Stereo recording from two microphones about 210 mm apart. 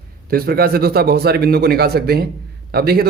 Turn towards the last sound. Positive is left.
turn(degrees=-45)  # may be behind; listen again after turning